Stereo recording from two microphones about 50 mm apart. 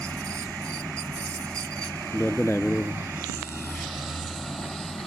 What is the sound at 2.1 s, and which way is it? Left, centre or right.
Speech, left.